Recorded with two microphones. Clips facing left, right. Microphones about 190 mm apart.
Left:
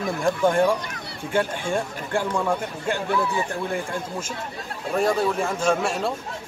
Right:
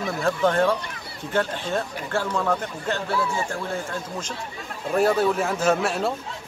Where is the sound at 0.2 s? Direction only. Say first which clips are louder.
Left 1 dB; 15° left (ahead or behind).